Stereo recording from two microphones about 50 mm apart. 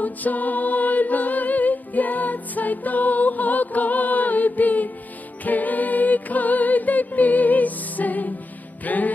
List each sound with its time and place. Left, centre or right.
0.0 s music: left